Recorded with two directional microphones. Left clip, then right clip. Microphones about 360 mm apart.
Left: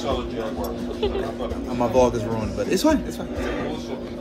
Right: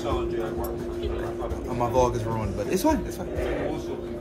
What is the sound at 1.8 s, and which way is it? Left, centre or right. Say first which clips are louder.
Speech: left 4 dB; centre.